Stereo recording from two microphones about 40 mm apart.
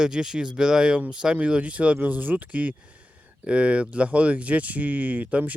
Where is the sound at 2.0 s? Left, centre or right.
Right.